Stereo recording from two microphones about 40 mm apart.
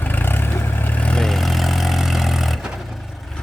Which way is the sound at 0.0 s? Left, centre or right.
Left.